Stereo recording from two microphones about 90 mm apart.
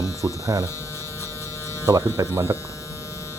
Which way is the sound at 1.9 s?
40° right (ahead or behind).